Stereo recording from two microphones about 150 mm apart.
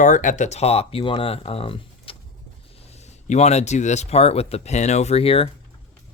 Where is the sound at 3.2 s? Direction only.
50° left (ahead or behind).